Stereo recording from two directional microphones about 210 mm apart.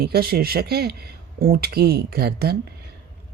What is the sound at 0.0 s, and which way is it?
Speech, 45° right (ahead or behind).